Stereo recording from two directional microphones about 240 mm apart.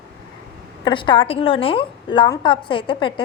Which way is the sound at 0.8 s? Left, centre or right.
Centre.